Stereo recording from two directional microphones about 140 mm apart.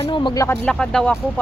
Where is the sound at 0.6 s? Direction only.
5° left (ahead or behind).